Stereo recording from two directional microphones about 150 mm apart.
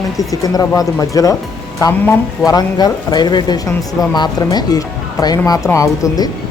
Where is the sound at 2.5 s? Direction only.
25° left (ahead or behind).